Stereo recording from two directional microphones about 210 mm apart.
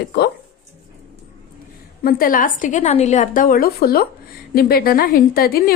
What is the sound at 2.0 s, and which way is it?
A woman's voice, 45° left (ahead or behind).